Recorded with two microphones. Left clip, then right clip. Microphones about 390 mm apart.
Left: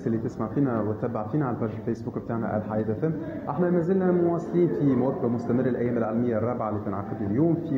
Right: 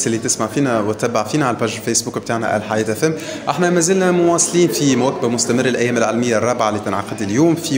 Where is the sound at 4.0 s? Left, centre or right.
Right.